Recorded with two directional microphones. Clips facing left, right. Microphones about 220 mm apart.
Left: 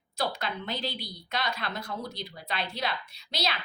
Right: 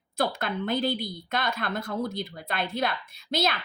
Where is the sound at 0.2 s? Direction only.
50° right (ahead or behind).